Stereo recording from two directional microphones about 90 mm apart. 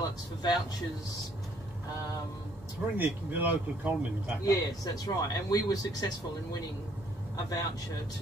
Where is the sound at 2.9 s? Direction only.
20° right (ahead or behind).